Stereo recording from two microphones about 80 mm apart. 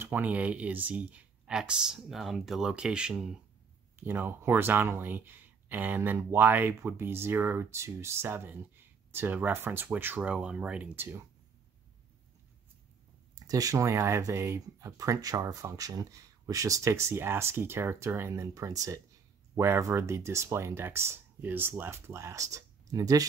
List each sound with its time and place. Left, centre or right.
0.0 s speech: right
1.5 s speech: centre
4.0 s speech: right
10.3 s speech: centre
11.0 s speech: right
13.5 s speech: right
15.0 s speech: right